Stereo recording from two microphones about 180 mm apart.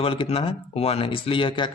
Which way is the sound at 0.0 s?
30° left (ahead or behind).